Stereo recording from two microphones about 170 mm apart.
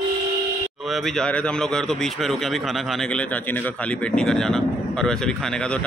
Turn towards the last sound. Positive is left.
turn(degrees=5)  # may be behind; listen again after turning